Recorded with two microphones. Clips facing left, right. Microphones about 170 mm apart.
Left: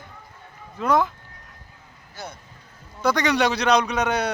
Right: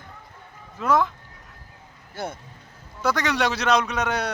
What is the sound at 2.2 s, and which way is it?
Speech, 55° right (ahead or behind).